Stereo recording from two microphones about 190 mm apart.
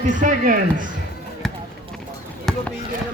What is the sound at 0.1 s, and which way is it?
Speech, 40° right (ahead or behind).